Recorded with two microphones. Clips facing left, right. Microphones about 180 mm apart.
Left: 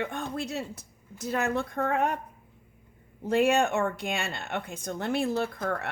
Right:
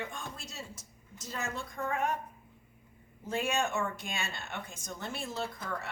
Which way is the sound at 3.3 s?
60° left (ahead or behind).